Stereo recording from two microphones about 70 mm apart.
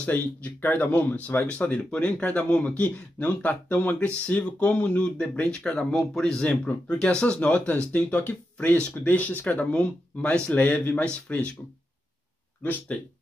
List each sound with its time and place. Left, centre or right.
0.0 s speech: left
12.6 s speech: left